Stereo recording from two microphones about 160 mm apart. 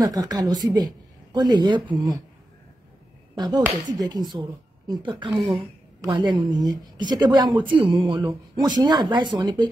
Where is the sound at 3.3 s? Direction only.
25° right (ahead or behind).